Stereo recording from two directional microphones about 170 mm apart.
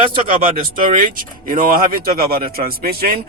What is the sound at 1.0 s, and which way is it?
Speech, 55° right (ahead or behind).